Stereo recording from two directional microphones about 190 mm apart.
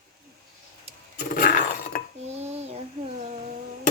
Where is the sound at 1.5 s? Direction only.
45° left (ahead or behind).